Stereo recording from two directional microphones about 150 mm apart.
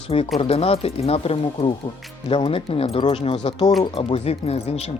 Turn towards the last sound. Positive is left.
turn(degrees=45)  # may be behind; listen again after turning